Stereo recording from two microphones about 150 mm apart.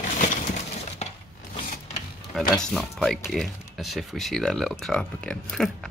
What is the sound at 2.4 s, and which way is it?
Speech, 5° left (ahead or behind).